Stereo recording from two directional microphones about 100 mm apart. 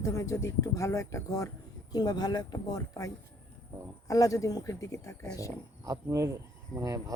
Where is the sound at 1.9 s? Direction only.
45° left (ahead or behind).